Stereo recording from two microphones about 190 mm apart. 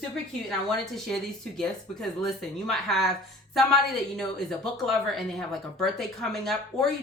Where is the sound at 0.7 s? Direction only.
Centre (ahead or behind).